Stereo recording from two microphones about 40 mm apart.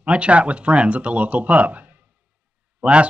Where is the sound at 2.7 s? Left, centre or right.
Right.